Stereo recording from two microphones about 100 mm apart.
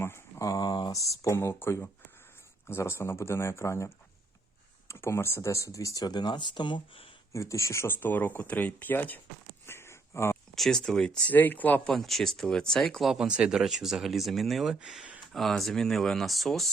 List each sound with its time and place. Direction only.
0.0 s a sound: 30° left (ahead or behind)
1.2 s speech: 30° left (ahead or behind); by 7.1 s 60° left (ahead or behind)
7.3 s speech: 30° left (ahead or behind)
9.6 s a sound: 25° left (ahead or behind)
10.5 s speech: 5° left (ahead or behind)
11.3 s speech: 15° left (ahead or behind)
11.9 s speech: centre (ahead or behind)